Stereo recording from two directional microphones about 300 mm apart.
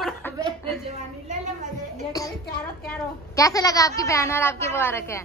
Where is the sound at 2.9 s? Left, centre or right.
Centre.